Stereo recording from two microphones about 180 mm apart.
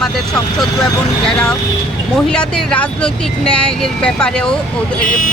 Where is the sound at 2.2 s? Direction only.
5° left (ahead or behind).